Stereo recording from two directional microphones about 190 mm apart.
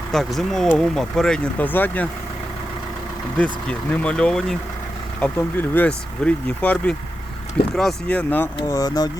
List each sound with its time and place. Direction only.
0.1 s speech: centre (ahead or behind)
3.3 s speech: 5° left (ahead or behind)
8.5 s speech: 20° left (ahead or behind)